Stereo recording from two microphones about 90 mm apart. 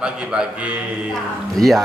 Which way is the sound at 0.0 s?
10° right (ahead or behind).